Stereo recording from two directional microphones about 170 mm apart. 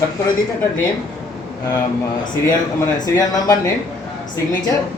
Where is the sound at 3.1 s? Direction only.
20° left (ahead or behind).